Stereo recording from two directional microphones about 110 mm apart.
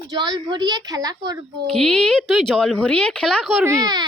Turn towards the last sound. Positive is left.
turn(degrees=-35)  # may be behind; listen again after turning